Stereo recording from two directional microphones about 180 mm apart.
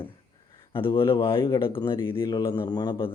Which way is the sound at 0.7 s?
30° left (ahead or behind).